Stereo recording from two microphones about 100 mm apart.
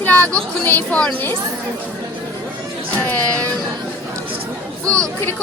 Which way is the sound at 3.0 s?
15° left (ahead or behind).